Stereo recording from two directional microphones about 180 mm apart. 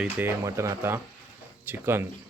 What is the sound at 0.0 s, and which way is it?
Speech, 10° right (ahead or behind).